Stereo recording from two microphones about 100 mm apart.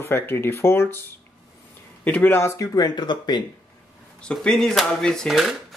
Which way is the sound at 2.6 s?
40° left (ahead or behind).